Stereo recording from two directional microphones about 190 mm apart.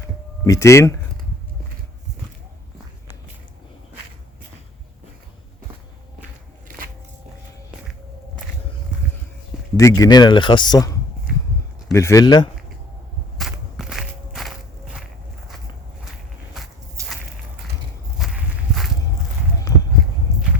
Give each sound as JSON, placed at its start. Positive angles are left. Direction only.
{"t": 0.4, "sound": "a man's voice", "side_deg": 15}
{"t": 9.7, "sound": "a man's voice", "side_deg": 15}
{"t": 13.4, "sound": "walk", "side_deg": 0}
{"t": 18.2, "sound": "walk", "side_deg": 0}